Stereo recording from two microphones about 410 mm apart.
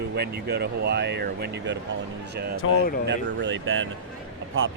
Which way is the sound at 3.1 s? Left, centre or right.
Right.